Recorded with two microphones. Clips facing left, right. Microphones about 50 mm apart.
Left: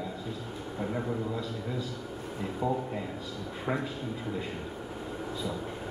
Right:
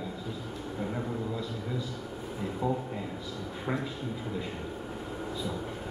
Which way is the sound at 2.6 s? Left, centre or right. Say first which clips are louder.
Left 1 dB; centre.